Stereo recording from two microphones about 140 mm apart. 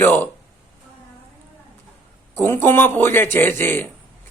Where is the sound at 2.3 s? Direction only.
15° left (ahead or behind).